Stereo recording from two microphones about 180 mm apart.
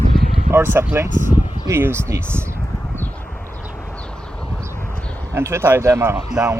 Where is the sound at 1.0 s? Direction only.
45° left (ahead or behind).